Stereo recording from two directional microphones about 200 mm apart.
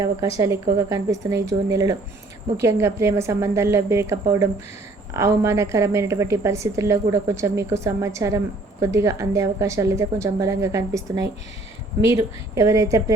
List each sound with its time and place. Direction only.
0.0 s a woman's voice: 15° right (ahead or behind)